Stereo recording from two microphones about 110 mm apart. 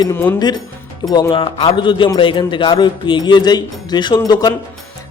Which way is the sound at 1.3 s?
50° left (ahead or behind).